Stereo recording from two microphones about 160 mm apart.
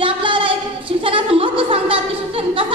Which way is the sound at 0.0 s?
35° right (ahead or behind).